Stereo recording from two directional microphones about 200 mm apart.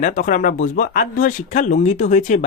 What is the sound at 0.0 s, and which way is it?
Speech, 40° left (ahead or behind).